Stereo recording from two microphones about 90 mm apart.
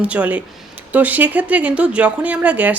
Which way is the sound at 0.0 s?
15° right (ahead or behind).